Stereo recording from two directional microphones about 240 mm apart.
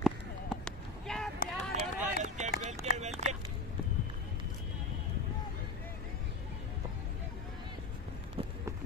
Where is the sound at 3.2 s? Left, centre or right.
Right.